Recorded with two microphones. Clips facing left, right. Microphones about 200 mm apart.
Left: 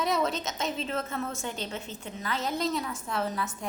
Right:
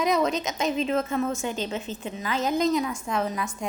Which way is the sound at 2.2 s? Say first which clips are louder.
Right 6 dB; 90° right.